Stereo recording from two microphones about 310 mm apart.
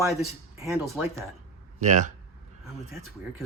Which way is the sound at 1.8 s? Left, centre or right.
Right.